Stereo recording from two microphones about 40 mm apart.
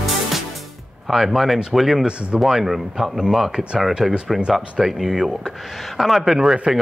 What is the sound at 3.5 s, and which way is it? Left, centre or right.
Speech, right.